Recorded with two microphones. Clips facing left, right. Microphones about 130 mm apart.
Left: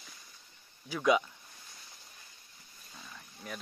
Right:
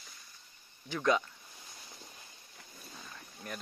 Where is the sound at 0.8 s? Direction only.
10° left (ahead or behind).